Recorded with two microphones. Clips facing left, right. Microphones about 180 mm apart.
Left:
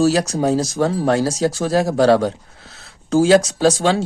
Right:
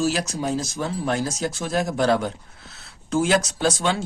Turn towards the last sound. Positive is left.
turn(degrees=35)  # may be behind; listen again after turning